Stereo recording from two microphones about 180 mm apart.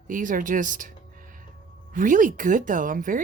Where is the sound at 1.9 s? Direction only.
45° right (ahead or behind).